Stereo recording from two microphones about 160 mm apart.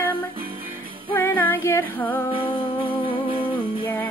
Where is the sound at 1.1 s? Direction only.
15° left (ahead or behind).